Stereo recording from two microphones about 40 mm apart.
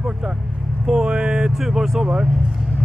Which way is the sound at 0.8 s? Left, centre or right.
Right.